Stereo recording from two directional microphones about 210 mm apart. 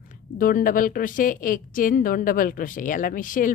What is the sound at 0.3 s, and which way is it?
A woman's voice, 40° left (ahead or behind).